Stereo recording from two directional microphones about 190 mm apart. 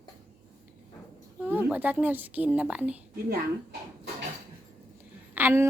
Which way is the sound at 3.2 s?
55° right (ahead or behind).